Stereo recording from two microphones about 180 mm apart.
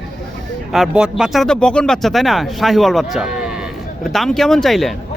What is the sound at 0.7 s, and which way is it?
Speech, 5° right (ahead or behind).